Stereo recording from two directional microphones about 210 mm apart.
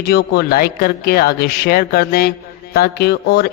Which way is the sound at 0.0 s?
50° left (ahead or behind).